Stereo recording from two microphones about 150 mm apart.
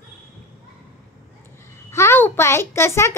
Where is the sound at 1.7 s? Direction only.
20° left (ahead or behind).